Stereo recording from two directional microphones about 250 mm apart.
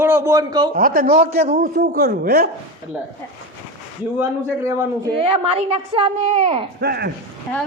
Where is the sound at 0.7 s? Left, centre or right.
Right.